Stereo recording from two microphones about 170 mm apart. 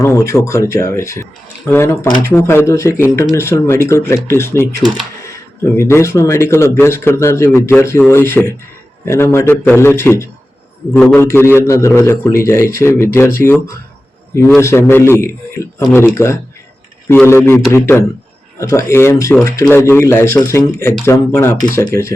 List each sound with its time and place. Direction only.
0.0 s a man's voice: 15° left (ahead or behind)
5.7 s a man's voice: 15° left (ahead or behind)